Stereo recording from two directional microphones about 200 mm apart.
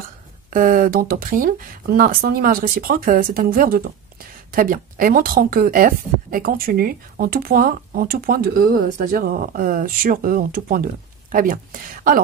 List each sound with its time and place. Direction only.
0.5 s speech: 45° right (ahead or behind)